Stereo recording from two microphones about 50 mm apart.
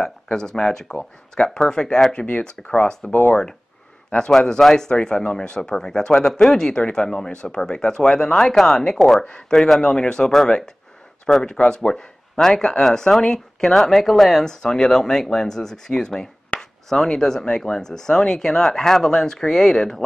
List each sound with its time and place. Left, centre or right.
0.0 s a man's voice: centre
4.5 s speech: centre